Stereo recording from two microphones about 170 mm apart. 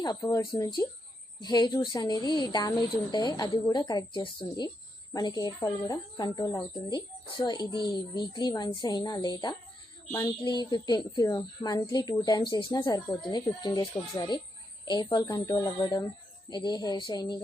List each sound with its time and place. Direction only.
0.0 s speech: 20° left (ahead or behind)